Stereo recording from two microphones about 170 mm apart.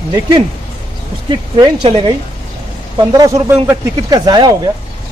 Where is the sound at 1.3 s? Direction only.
30° right (ahead or behind).